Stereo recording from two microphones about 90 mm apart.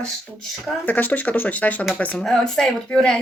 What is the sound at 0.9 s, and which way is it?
A woman's voice, 20° left (ahead or behind).